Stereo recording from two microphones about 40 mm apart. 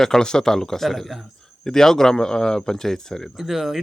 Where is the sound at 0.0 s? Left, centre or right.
Centre.